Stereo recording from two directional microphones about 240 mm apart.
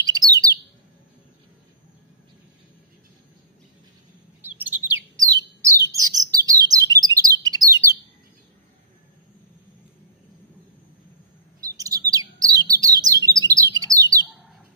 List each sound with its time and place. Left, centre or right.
0.0 s chirp: centre
4.4 s bird: centre
6.3 s chirp: centre
11.7 s chirp: centre
12.1 s bird: centre